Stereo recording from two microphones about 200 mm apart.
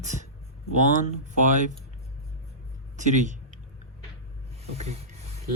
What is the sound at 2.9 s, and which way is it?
Speech, 40° right (ahead or behind).